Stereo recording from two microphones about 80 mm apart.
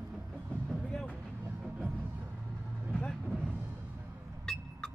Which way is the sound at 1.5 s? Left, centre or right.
Centre.